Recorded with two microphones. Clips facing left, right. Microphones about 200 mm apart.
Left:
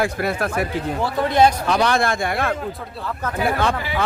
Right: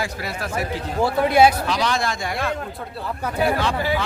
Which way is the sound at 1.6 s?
55° left (ahead or behind).